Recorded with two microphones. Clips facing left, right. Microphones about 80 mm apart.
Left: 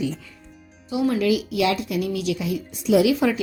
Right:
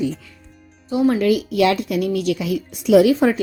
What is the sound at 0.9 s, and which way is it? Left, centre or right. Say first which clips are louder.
A woman's voice: right 4 dB; right.